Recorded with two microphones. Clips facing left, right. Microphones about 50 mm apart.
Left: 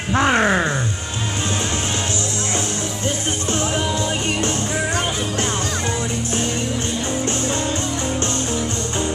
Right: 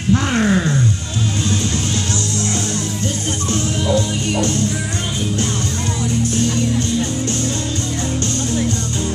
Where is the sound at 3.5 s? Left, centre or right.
Left.